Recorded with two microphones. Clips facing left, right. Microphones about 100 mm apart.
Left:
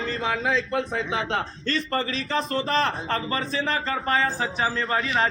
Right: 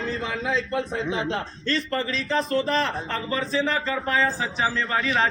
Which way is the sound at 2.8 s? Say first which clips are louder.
Left 2 dB; 50° left (ahead or behind).